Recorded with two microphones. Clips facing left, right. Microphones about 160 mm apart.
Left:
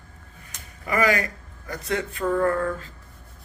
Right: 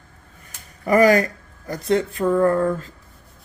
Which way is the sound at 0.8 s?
40° right (ahead or behind).